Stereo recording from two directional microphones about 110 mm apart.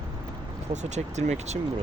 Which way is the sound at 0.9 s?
90° right.